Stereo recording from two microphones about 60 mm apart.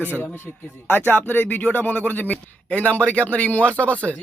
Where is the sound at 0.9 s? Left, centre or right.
Left.